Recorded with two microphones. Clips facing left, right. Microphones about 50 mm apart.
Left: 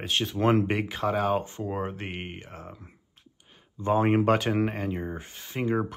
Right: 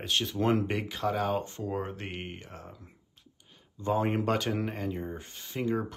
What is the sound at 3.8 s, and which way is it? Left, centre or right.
Speech, left.